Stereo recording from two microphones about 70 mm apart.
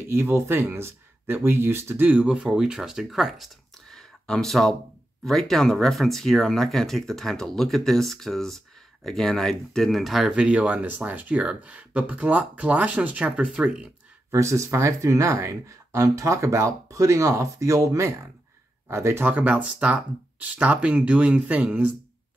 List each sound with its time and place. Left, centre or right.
0.1 s speech: right
2.0 s speech: centre
4.0 s a sound: centre
5.2 s speech: centre
10.3 s speech: centre
14.3 s speech: right
19.2 s speech: right